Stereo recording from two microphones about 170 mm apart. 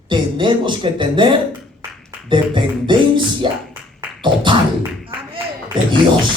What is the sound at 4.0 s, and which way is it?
Music, 25° right (ahead or behind).